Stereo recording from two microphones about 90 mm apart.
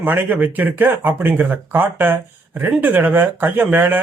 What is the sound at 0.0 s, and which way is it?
Speech, 25° right (ahead or behind).